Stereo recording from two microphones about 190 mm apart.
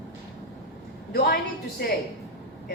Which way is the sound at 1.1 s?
50° left (ahead or behind).